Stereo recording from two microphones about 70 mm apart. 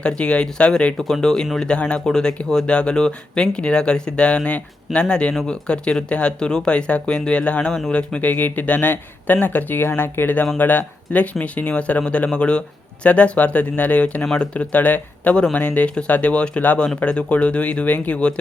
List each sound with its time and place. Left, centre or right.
0.0 s speech: centre
0.9 s speech: centre